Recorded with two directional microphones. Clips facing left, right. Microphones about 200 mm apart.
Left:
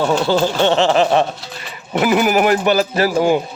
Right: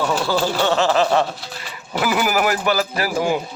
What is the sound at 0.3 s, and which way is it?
Speech, 25° left (ahead or behind).